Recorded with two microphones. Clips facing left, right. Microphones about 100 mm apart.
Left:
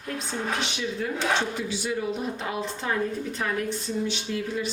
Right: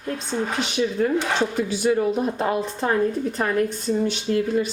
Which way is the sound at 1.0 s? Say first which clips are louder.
Right 3 dB; 45° right (ahead or behind).